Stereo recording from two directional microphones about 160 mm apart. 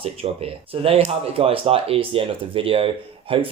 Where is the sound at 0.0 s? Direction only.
35° right (ahead or behind).